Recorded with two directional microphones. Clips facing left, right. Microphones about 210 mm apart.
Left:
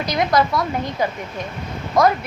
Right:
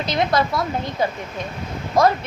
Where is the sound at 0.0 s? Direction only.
25° right (ahead or behind).